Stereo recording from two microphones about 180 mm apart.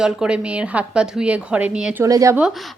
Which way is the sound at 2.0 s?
20° right (ahead or behind).